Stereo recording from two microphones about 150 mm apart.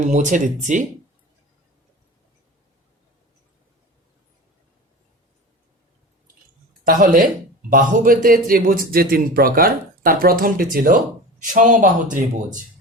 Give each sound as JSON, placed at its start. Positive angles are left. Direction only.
{"t": 0.1, "sound": "speech", "side_deg": -55}
{"t": 6.8, "sound": "a man's voice", "side_deg": -70}
{"t": 11.4, "sound": "speech", "side_deg": -60}